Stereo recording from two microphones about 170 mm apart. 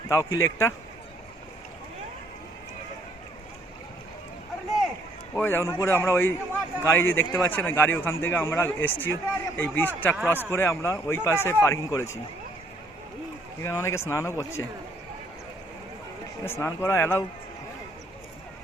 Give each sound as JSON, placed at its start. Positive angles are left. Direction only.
{"t": 0.1, "sound": "a man's voice", "side_deg": 15}
{"t": 5.3, "sound": "a man's voice", "side_deg": 15}
{"t": 13.6, "sound": "a man's voice", "side_deg": 15}
{"t": 16.4, "sound": "a man's voice", "side_deg": 15}